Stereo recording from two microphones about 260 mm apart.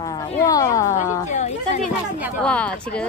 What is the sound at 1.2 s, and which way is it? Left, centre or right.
Speech, left.